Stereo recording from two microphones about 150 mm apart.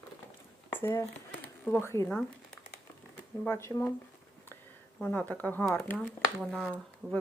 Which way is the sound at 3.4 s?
15° left (ahead or behind).